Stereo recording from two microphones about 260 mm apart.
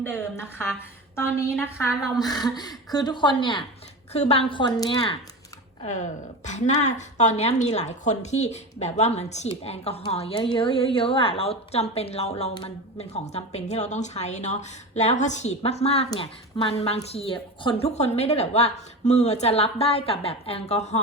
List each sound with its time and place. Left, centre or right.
0.0 s a woman's voice: centre; by 21.0 s left